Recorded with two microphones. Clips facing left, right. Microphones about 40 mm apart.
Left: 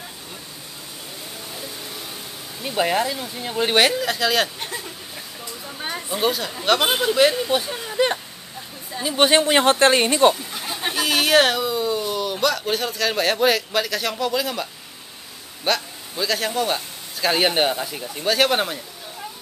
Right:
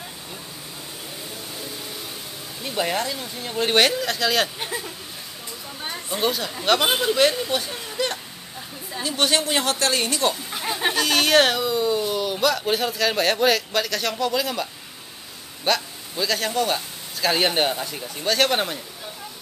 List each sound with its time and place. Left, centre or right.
2.6 s speech: centre
5.8 s a sound: centre
6.0 s speech: centre; by 10.3 s left
10.6 s chicken: centre
11.0 s a man's voice: centre